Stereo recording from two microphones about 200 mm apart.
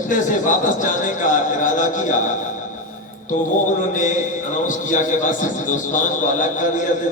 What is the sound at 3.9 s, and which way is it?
A man's voice, 40° left (ahead or behind).